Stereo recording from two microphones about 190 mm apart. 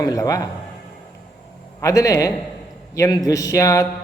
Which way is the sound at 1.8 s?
20° left (ahead or behind).